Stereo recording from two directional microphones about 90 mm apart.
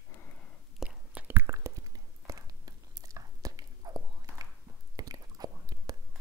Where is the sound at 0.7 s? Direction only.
15° right (ahead or behind).